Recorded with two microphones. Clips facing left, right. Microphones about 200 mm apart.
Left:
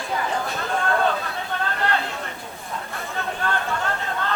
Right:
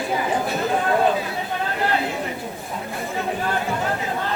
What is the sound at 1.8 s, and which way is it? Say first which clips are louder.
Chatter: right 5 dB; 10° right (ahead or behind).